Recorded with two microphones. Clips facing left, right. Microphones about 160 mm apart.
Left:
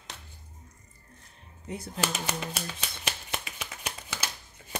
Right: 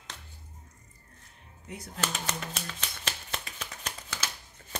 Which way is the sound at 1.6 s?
30° left (ahead or behind).